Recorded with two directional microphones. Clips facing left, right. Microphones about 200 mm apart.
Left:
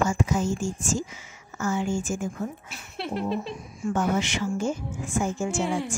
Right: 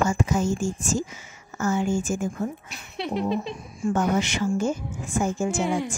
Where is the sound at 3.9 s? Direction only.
45° right (ahead or behind).